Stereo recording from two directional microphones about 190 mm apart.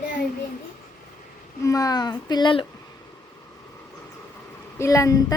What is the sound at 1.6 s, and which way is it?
Speech, 15° left (ahead or behind).